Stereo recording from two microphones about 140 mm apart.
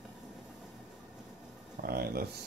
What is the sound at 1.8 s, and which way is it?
Speech, 90° right.